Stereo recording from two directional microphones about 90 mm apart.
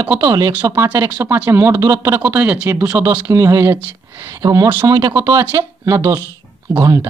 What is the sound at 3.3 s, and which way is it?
Speech, 35° right (ahead or behind).